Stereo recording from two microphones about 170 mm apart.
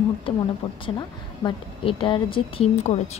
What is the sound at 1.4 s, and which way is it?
A woman's voice, 30° left (ahead or behind).